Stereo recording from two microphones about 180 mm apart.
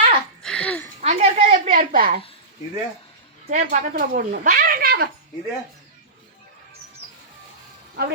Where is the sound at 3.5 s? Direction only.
50° right (ahead or behind).